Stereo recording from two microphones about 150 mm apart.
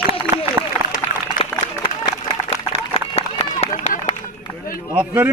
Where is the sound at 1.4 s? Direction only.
40° left (ahead or behind).